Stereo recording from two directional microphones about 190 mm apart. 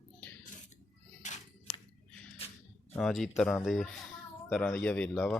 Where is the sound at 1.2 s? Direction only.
40° left (ahead or behind).